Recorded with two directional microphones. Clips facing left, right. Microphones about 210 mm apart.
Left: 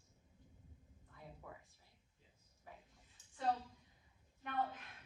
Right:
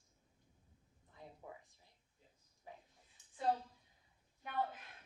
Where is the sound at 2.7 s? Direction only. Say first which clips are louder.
Right 3 dB; 20° right (ahead or behind).